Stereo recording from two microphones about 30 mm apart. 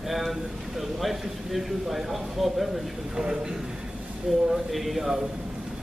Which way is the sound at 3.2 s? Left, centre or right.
Right.